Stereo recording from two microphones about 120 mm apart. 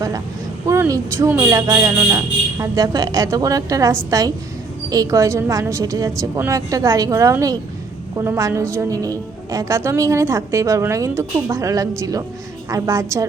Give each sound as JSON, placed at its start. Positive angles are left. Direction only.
{"t": 0.7, "sound": "a woman's voice", "side_deg": -25}